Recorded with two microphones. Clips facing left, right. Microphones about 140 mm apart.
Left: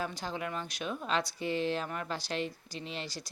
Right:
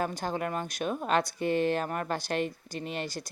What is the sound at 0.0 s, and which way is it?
Speech, 50° right (ahead or behind).